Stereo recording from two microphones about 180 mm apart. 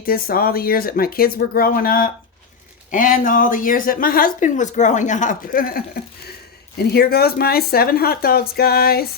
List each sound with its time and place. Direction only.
0.0 s a woman's voice: 55° left (ahead or behind)